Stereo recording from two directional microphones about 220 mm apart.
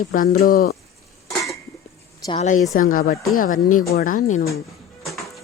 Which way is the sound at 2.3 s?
30° left (ahead or behind).